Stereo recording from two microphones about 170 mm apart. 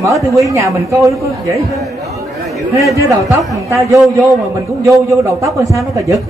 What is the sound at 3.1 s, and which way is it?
A man's voice, 20° right (ahead or behind).